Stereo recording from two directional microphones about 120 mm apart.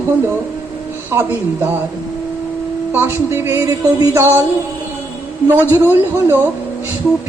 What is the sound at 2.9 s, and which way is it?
Music, 20° right (ahead or behind).